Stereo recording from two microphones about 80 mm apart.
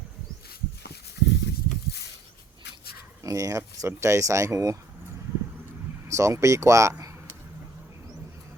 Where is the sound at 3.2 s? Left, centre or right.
Right.